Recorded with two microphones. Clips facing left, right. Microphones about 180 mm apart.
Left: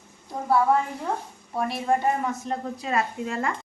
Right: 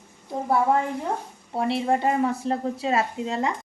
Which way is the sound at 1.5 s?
25° right (ahead or behind).